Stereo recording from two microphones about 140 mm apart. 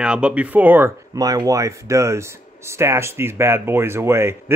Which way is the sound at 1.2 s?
25° right (ahead or behind).